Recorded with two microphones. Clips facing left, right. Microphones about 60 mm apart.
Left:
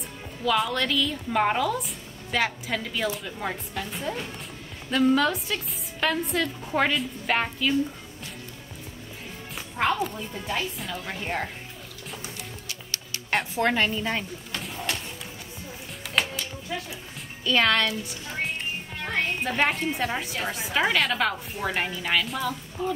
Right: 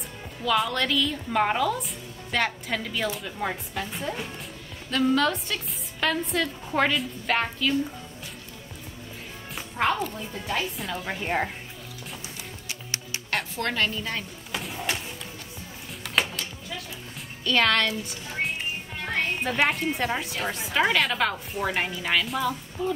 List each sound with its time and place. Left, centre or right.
0.5 s a child's voice: centre
4.9 s a child's voice: centre
9.6 s music: centre
10.0 s a child's voice: centre
12.6 s music: right
13.6 s a woman's voice: centre
14.5 s a sound: centre
17.5 s a child's voice: centre